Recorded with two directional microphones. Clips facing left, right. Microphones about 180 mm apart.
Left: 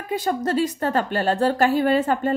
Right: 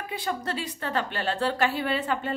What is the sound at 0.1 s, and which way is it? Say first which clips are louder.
A woman's voice: left 9 dB; 45° left (ahead or behind).